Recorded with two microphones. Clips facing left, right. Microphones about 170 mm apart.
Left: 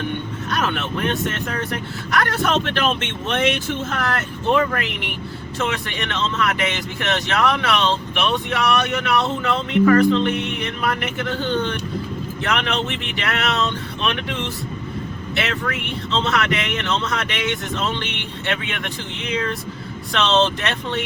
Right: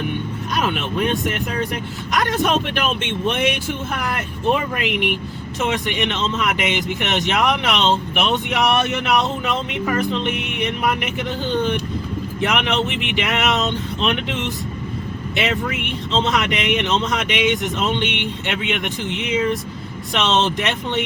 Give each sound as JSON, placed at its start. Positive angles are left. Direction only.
{"t": 0.5, "sound": "speech", "side_deg": -15}